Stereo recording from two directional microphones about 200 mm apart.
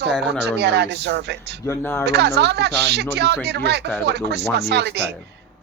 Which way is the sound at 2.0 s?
55° right (ahead or behind).